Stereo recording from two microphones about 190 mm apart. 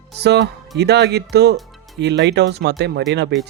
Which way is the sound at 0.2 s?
60° right (ahead or behind).